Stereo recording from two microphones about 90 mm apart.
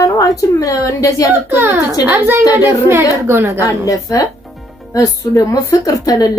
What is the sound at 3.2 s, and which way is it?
Speech, 30° right (ahead or behind).